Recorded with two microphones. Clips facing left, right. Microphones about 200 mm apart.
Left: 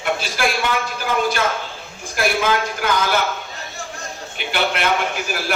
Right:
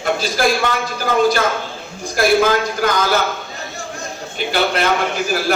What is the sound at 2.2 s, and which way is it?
Speech, 40° right (ahead or behind).